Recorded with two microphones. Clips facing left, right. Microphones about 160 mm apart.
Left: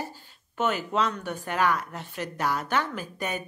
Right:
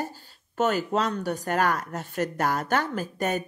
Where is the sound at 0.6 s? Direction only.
40° right (ahead or behind).